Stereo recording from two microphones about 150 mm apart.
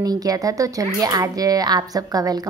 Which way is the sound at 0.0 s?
25° right (ahead or behind).